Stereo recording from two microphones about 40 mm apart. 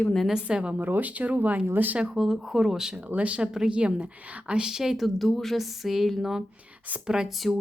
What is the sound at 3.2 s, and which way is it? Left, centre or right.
Speech, right.